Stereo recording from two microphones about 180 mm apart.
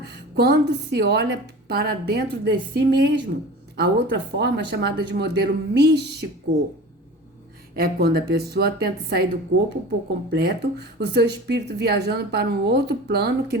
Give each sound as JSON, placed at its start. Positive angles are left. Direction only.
{"t": 0.3, "sound": "speech", "side_deg": -65}
{"t": 7.8, "sound": "speech", "side_deg": -60}